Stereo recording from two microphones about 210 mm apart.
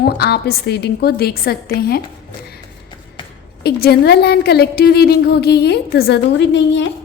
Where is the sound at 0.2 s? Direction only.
50° left (ahead or behind).